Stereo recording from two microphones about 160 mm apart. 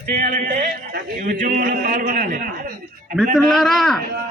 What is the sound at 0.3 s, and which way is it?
Speech, 55° right (ahead or behind).